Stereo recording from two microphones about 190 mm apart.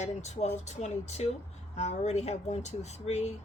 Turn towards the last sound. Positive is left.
turn(degrees=35)  # may be behind; listen again after turning